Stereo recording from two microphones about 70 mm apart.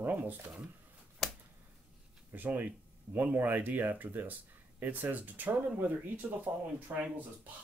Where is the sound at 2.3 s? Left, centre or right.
Right.